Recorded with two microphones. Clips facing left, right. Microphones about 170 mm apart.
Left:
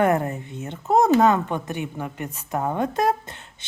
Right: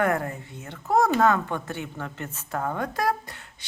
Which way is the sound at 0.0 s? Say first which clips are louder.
Left 4 dB; 20° left (ahead or behind).